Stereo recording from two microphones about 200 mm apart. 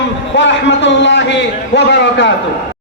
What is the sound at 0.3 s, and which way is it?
A man's voice, 65° left (ahead or behind).